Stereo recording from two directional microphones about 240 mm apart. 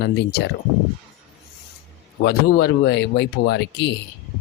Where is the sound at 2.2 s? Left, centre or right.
Left.